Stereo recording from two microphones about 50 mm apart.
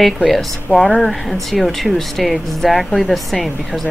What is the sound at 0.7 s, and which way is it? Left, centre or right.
Speech, right.